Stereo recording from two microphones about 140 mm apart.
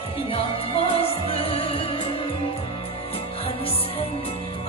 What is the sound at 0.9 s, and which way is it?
Music, 45° left (ahead or behind).